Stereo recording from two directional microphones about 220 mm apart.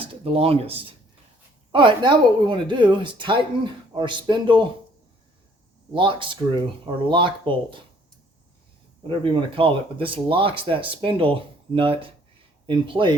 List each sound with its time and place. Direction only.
0.0 s speech: 25° right (ahead or behind)
5.9 s speech: 20° right (ahead or behind)
9.0 s speech: 20° right (ahead or behind)